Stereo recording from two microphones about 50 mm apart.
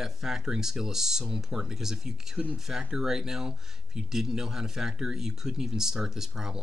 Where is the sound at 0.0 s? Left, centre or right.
Centre.